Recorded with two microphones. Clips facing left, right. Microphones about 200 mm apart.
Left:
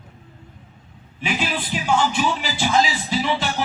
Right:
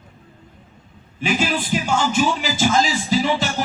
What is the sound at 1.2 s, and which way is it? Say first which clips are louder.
Speech: right 4 dB; 45° right (ahead or behind).